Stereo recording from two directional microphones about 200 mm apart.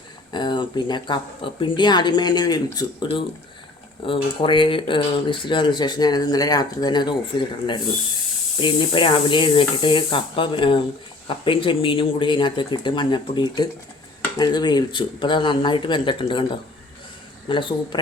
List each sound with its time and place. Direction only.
0.3 s speech: 20° left (ahead or behind)
17.5 s speech: 25° left (ahead or behind)